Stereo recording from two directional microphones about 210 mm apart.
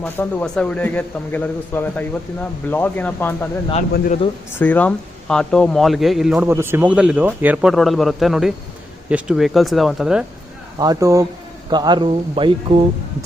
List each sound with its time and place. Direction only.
0.0 s a man's voice: 10° left (ahead or behind)
3.9 s speech: 45° left (ahead or behind)
4.6 s speech: 5° left (ahead or behind)
10.8 s speech: 15° right (ahead or behind)